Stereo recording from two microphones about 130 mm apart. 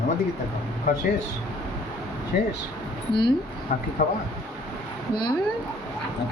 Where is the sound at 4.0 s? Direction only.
90° left.